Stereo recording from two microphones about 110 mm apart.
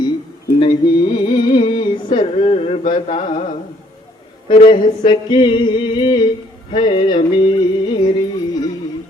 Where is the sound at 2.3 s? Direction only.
65° left (ahead or behind); by 3.5 s 80° left.